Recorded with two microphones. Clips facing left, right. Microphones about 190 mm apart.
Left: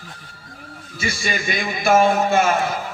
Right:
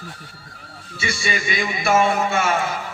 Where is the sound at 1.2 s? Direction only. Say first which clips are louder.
Right 1 dB; 35° left (ahead or behind).